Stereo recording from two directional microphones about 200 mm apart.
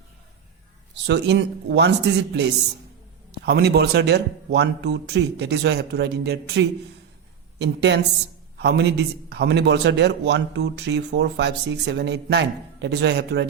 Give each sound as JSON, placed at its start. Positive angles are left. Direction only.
{"t": 1.0, "sound": "a man's voice", "side_deg": -60}